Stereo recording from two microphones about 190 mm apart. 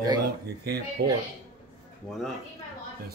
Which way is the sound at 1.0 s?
60° right (ahead or behind).